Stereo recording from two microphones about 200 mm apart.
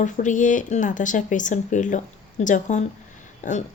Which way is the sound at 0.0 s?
40° left (ahead or behind).